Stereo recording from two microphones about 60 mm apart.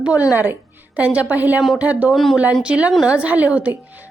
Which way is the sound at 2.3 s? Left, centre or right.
Centre.